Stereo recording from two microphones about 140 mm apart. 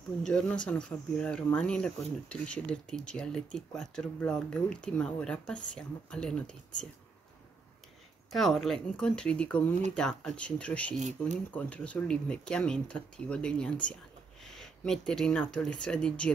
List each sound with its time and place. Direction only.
0.2 s speech: 5° left (ahead or behind)
8.3 s speech: centre (ahead or behind)
11.0 s speech: 55° right (ahead or behind)
11.5 s speech: 10° left (ahead or behind)